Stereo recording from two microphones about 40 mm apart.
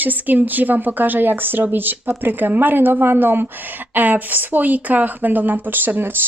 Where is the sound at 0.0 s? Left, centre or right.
Right.